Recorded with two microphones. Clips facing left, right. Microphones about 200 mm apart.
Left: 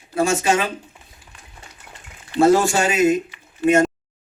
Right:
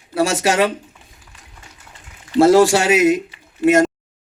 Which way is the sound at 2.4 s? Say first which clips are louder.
Right 4 dB; 85° right.